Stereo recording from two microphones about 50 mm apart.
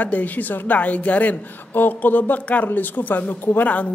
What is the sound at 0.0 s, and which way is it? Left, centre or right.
Speech, left.